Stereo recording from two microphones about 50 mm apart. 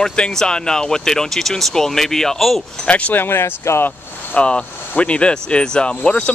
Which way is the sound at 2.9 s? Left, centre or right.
Left.